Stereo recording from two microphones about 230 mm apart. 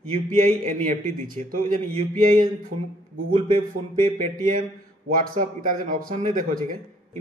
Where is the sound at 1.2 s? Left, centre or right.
Right.